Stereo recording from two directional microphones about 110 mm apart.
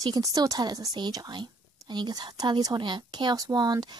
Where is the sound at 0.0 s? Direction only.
35° right (ahead or behind).